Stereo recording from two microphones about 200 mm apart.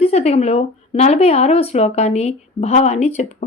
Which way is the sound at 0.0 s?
35° left (ahead or behind).